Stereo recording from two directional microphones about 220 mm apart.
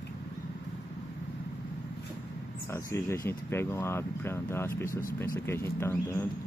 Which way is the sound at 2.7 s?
10° left (ahead or behind).